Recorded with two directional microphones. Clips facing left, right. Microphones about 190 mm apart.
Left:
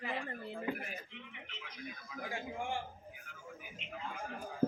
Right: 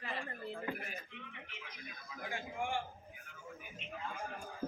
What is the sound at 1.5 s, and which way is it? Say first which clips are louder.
Speech: left 1 dB; 15° right (ahead or behind).